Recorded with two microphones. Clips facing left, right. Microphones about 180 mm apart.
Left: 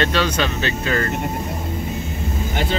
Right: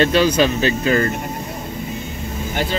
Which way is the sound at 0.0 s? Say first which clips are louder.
Right 5 dB; 10° right (ahead or behind).